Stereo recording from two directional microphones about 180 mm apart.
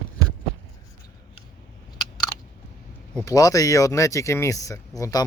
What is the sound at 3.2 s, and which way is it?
Speech, 20° left (ahead or behind).